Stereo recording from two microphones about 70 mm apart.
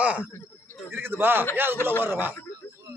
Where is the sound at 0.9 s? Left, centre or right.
Right.